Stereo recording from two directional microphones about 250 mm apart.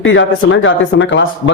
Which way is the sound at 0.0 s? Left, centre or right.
Left.